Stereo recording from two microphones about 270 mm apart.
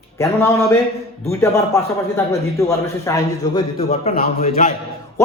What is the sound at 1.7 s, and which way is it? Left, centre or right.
A man's voice, centre.